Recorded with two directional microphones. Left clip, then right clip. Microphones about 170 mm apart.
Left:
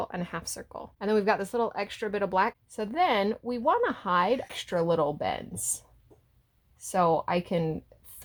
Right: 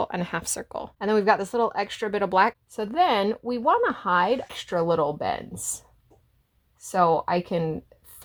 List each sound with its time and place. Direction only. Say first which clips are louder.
0.0 s speech: right 6 dB; 40° right (ahead or behind)
0.9 s speech: right 4 dB; 25° right (ahead or behind)